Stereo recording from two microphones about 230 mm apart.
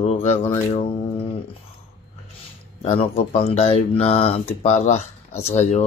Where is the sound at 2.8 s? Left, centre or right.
Left.